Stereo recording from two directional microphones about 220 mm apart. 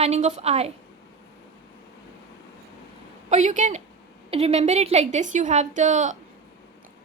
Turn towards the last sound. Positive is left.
turn(degrees=-35)  # may be behind; listen again after turning